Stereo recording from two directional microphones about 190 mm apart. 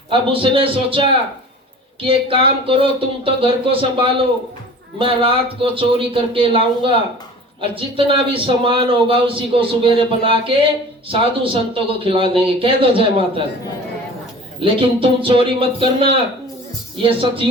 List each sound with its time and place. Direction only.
0.1 s speech: 30° right (ahead or behind)
2.0 s speech: 30° right (ahead or behind)
14.6 s speech: 30° right (ahead or behind)